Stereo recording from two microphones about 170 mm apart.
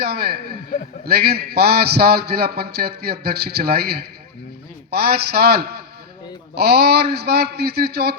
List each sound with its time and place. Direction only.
0.0 s a man's voice: 65° right (ahead or behind)